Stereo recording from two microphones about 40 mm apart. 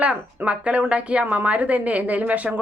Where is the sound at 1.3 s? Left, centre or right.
Right.